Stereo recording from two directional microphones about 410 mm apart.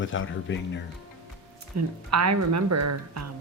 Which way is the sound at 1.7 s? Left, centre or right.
Right.